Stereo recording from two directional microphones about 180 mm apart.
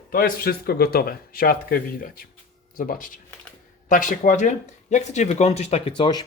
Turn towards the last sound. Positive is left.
turn(degrees=25)  # may be behind; listen again after turning